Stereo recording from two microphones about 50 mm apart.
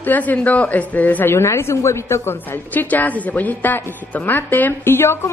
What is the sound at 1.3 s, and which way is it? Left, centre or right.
A woman's voice, left.